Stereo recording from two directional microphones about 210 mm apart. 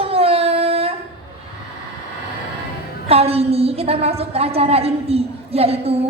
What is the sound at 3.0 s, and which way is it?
A woman's voice, 30° right (ahead or behind).